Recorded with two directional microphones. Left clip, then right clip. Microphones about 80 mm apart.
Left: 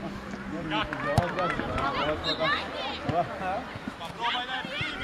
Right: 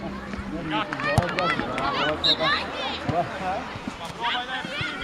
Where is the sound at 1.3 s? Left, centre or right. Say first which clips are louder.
Right 4 dB; right.